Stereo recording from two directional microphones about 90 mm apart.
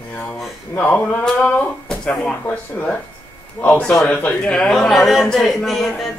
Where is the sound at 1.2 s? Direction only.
10° left (ahead or behind).